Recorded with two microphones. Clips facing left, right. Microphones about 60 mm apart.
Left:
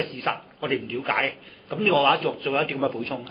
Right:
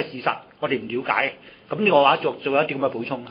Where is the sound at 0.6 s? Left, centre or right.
Centre.